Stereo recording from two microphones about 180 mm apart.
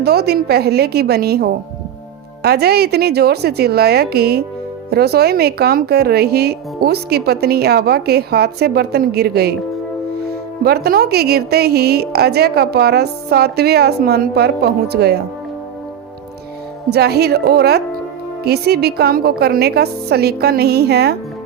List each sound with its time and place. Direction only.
0.0 s speech: 60° right (ahead or behind)
10.6 s speech: 60° right (ahead or behind)
16.9 s speech: 60° right (ahead or behind)